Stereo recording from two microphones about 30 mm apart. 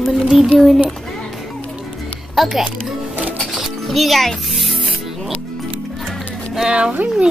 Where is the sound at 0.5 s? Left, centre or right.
Centre.